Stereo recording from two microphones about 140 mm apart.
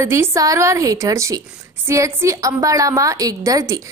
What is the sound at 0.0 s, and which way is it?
A woman's voice, 20° right (ahead or behind).